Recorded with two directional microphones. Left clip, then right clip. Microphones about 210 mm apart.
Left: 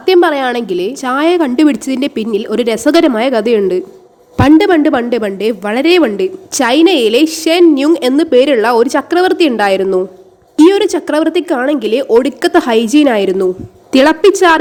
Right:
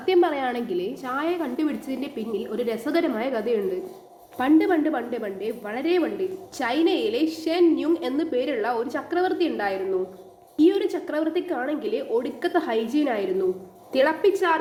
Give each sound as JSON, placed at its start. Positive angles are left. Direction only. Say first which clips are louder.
{"t": 0.0, "sound": "a woman's voice", "louder": "left 12 dB", "side_deg": 50}